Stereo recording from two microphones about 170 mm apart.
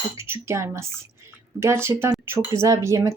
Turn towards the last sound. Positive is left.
turn(degrees=-20)  # may be behind; listen again after turning